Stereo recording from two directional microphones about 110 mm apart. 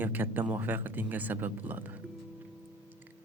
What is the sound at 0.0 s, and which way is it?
Speech, 20° right (ahead or behind).